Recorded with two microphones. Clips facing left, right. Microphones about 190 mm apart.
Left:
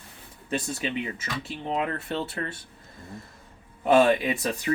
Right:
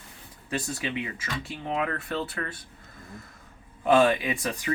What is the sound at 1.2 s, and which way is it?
Speech, 25° left (ahead or behind).